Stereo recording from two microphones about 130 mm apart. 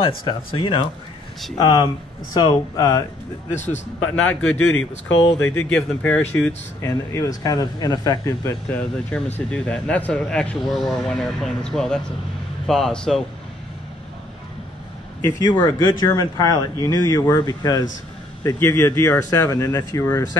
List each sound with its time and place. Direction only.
0.0 s speech: 40° left (ahead or behind)
3.5 s a man's voice: 65° left (ahead or behind)
4.1 s speech: 10° left (ahead or behind)
6.8 s speech: 25° left (ahead or behind)
8.7 s speech: 10° left (ahead or behind)
15.2 s speech: 25° left (ahead or behind)